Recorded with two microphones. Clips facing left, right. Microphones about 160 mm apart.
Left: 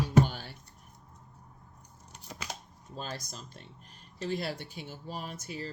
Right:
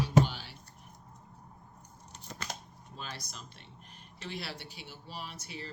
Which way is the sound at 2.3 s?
5° left (ahead or behind).